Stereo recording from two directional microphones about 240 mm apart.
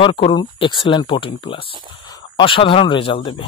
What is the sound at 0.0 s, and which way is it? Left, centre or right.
Speech, left.